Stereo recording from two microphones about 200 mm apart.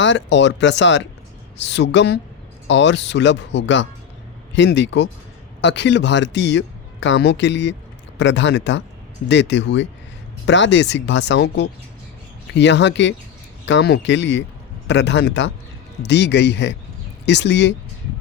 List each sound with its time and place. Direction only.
0.0 s speech: 65° left (ahead or behind)